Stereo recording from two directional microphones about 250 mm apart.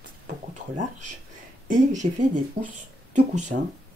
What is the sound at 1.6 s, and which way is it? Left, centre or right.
A woman's voice, right.